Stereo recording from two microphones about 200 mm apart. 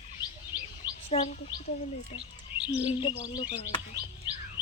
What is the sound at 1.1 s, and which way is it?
Speech, 30° left (ahead or behind).